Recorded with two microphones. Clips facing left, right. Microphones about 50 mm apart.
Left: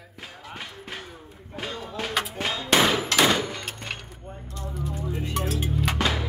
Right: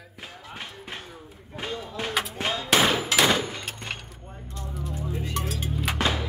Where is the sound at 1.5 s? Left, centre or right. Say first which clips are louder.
Right 1 dB; centre.